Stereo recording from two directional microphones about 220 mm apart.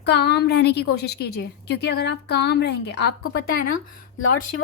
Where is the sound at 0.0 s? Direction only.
50° left (ahead or behind).